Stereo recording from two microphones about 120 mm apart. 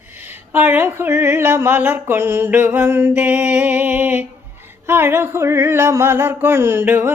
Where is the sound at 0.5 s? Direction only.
15° right (ahead or behind).